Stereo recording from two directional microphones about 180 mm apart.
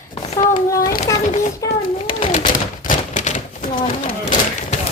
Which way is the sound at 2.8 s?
40° left (ahead or behind).